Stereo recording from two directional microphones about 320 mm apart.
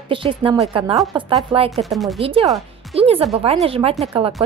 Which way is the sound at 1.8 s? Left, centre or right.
Centre.